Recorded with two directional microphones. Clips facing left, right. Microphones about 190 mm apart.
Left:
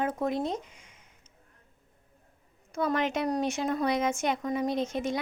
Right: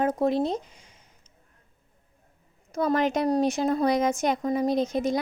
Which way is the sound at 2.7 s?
40° right (ahead or behind).